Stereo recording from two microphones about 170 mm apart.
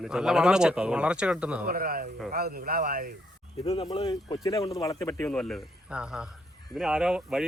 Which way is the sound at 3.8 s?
25° left (ahead or behind).